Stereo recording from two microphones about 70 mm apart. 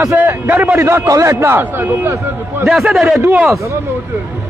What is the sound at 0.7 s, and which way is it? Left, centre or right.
A man's voice, right.